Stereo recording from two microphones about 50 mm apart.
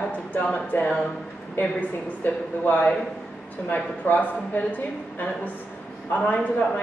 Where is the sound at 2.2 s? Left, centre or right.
Left.